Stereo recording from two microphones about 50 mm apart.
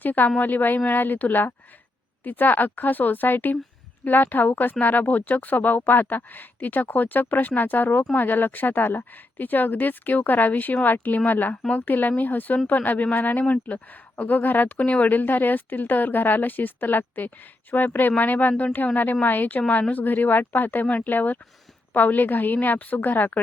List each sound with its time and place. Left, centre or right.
0.0 s speech: left